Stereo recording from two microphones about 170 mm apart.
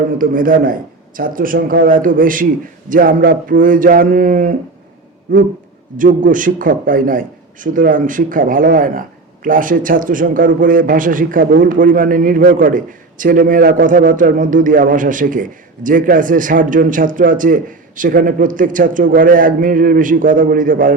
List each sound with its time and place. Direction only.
0.2 s a man's voice: 55° right (ahead or behind)